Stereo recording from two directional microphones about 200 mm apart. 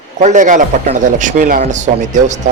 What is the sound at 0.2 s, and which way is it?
Speech, 35° right (ahead or behind).